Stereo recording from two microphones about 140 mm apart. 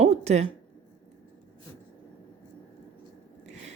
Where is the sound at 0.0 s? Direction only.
50° right (ahead or behind).